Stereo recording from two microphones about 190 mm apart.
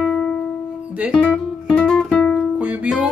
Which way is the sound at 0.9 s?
5° right (ahead or behind).